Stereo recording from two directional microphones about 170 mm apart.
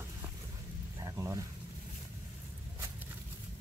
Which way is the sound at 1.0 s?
20° right (ahead or behind).